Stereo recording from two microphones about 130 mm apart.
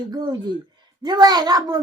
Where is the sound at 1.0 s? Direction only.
30° right (ahead or behind).